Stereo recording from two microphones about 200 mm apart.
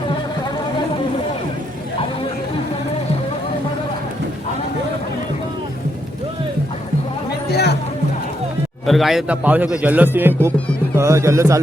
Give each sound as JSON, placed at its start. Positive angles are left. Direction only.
{"t": 7.5, "sound": "music", "side_deg": 55}
{"t": 8.9, "sound": "speech", "side_deg": 0}